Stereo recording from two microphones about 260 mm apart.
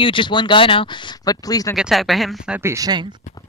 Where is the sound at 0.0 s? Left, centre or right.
Centre.